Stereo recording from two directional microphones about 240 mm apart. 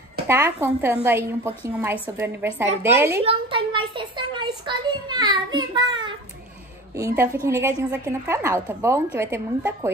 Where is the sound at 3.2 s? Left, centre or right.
Right.